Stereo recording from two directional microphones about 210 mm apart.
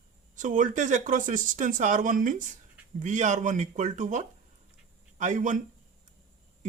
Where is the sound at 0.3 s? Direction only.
35° right (ahead or behind).